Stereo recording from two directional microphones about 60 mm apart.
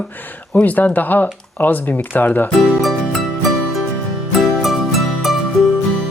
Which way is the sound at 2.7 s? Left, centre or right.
Centre.